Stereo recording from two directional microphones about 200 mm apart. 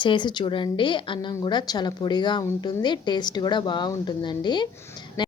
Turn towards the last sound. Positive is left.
turn(degrees=20)  # may be behind; listen again after turning